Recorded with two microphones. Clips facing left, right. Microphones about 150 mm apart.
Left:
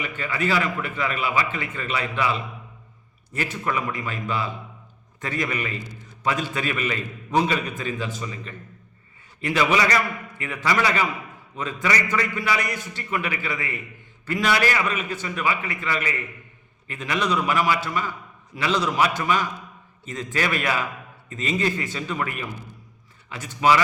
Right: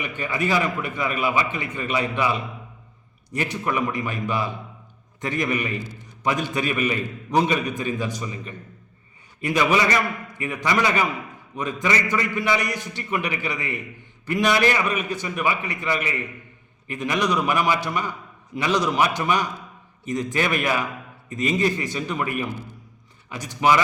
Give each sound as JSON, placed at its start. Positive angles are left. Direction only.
{"t": 0.0, "sound": "a man's voice", "side_deg": -20}
{"t": 9.7, "sound": "a man's voice", "side_deg": -25}